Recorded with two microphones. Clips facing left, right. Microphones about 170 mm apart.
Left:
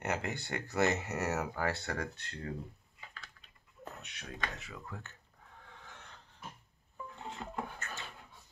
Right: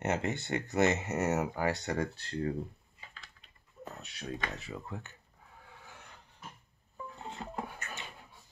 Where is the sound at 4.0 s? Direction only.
35° right (ahead or behind).